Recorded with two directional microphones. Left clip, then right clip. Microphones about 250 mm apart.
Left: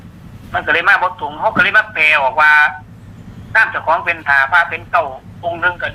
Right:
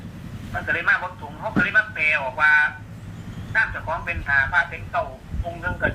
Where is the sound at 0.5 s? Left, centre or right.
Left.